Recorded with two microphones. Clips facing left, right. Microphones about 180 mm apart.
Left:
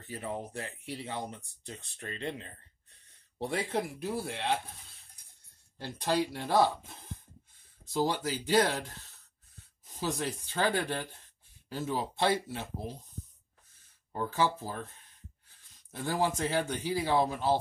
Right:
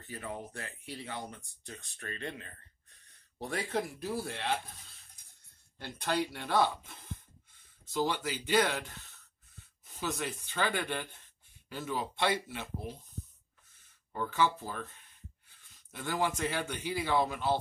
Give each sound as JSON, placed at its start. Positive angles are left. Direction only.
{"t": 0.1, "sound": "speech", "side_deg": 30}
{"t": 6.3, "sound": "speech", "side_deg": 35}
{"t": 9.9, "sound": "speech", "side_deg": 35}
{"t": 14.1, "sound": "speech", "side_deg": 35}
{"t": 15.9, "sound": "speech", "side_deg": 35}